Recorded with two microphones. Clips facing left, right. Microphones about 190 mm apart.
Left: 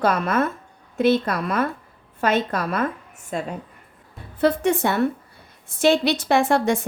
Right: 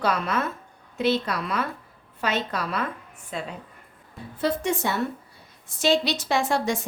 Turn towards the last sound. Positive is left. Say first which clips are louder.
# left 5 dB
turn(degrees=55)  # may be behind; listen again after turning